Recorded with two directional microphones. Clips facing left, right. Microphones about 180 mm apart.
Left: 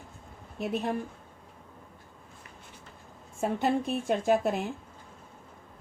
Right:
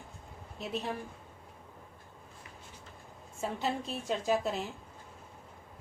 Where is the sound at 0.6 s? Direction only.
55° left (ahead or behind).